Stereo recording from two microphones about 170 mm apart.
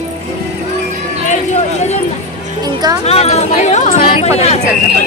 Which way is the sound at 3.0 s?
40° left (ahead or behind).